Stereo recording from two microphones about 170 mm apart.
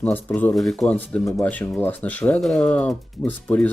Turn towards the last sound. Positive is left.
turn(degrees=10)  # may be behind; listen again after turning